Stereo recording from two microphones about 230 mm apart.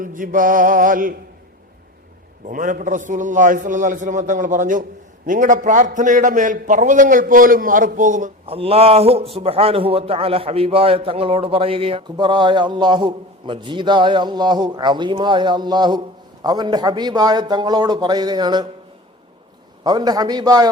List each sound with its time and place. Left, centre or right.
0.0 s mantra: right
2.5 s a man's voice: right; by 18.7 s centre
19.8 s a man's voice: centre